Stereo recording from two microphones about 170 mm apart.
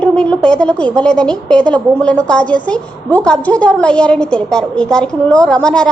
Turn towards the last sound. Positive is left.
turn(degrees=5)  # may be behind; listen again after turning